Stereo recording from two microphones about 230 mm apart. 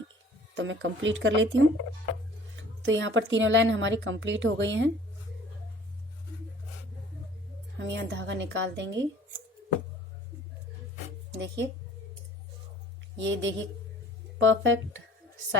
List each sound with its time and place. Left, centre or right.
0.5 s speech: right
7.8 s speech: right
11.3 s speech: right
13.1 s speech: right